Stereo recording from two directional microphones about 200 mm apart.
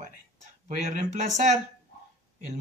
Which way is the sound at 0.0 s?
40° right (ahead or behind).